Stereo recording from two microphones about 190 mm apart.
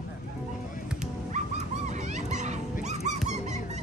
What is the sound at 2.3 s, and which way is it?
Dog, 40° right (ahead or behind).